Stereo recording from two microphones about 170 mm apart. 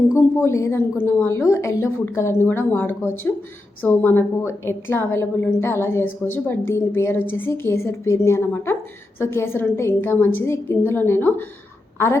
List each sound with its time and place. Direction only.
0.3 s a woman's voice: 15° left (ahead or behind)